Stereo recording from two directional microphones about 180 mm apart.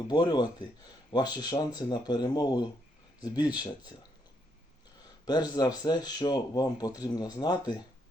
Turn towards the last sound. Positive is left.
turn(degrees=20)  # may be behind; listen again after turning